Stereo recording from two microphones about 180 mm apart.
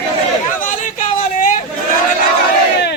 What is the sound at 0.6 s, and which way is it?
Chatter, 45° left (ahead or behind).